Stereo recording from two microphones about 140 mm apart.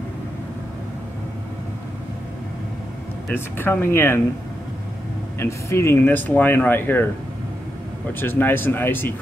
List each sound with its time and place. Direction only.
3.3 s speech: 15° left (ahead or behind)
5.4 s speech: 20° left (ahead or behind)
8.1 s speech: 15° left (ahead or behind)